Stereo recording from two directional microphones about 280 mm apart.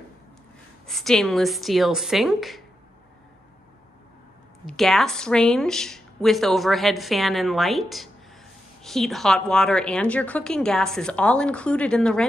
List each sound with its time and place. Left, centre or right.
0.8 s a woman's voice: centre
4.6 s a woman's voice: centre